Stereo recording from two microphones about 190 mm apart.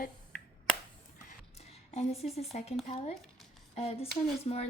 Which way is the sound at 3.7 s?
35° left (ahead or behind).